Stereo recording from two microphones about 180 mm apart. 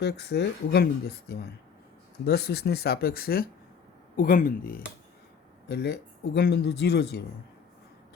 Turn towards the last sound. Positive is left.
turn(degrees=65)  # may be behind; listen again after turning